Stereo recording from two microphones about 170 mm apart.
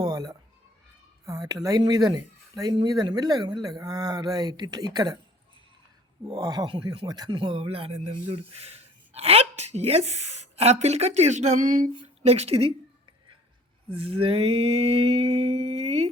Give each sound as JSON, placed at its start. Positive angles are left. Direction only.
{"t": 0.0, "sound": "a sound", "side_deg": -25}
{"t": 1.2, "sound": "speech", "side_deg": -20}
{"t": 6.2, "sound": "speech", "side_deg": -30}
{"t": 13.9, "sound": "speech", "side_deg": -35}